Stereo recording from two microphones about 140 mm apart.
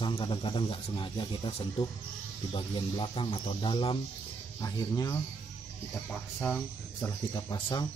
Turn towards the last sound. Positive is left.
turn(degrees=30)  # may be behind; listen again after turning